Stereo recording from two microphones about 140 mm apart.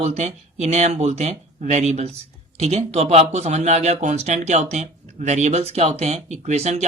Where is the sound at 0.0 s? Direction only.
50° right (ahead or behind).